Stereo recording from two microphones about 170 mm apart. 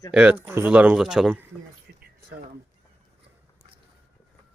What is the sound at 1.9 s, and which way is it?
Speech, 70° right (ahead or behind).